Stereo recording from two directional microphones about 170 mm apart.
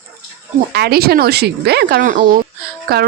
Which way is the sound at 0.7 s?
70° right (ahead or behind).